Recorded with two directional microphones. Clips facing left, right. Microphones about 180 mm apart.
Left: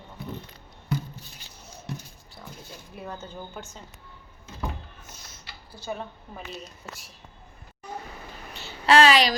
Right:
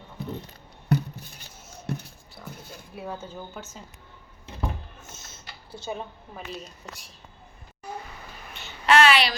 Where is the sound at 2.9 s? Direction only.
5° right (ahead or behind).